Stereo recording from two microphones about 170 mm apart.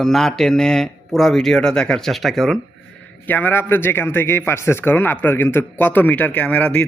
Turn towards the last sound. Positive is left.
turn(degrees=5)  # may be behind; listen again after turning